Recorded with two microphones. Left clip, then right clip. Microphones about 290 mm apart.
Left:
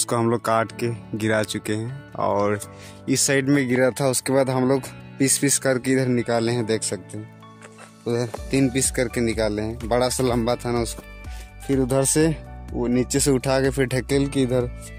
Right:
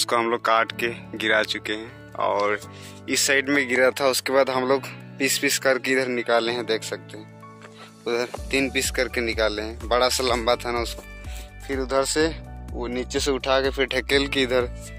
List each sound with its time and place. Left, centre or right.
0.0 s speech: left
8.0 s speech: centre
11.7 s speech: left
14.3 s speech: centre